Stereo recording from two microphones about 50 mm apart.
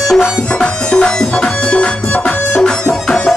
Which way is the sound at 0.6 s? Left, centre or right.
Centre.